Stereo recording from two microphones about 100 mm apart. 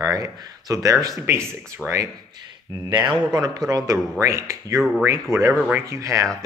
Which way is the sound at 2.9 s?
45° right (ahead or behind).